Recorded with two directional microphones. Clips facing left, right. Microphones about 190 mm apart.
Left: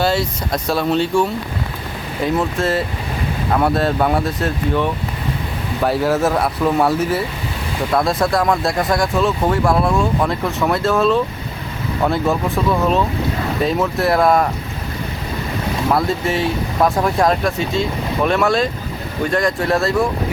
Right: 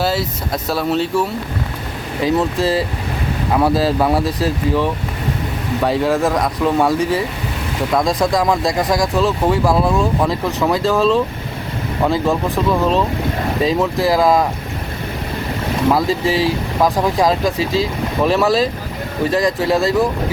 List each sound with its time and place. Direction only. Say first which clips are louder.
0.0 s speech: left 1 dB; centre (ahead or behind)
8.2 s speech: right 1 dB; 15° right (ahead or behind)
8.4 s speech: right 1 dB; centre (ahead or behind)
15.9 s speech: right 2 dB; centre (ahead or behind)